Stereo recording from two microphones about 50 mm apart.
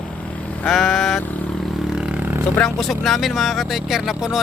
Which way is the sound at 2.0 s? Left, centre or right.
Centre.